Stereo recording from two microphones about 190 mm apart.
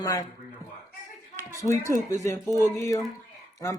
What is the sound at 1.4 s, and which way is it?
A woman's voice, 15° left (ahead or behind).